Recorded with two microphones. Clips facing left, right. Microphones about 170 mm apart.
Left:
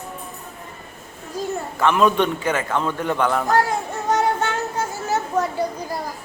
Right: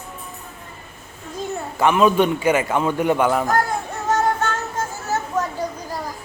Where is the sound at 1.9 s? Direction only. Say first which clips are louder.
Right 2 dB; 5° right (ahead or behind).